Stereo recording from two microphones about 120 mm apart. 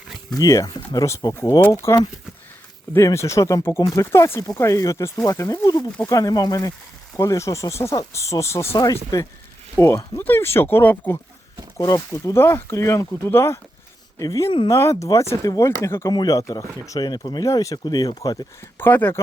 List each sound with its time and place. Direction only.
0.3 s speech: 30° left (ahead or behind)
11.8 s speech: 30° left (ahead or behind)
18.8 s speech: 15° left (ahead or behind)